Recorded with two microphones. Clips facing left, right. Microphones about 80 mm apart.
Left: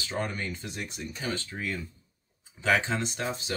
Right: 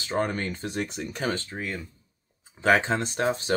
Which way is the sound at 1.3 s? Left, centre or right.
Right.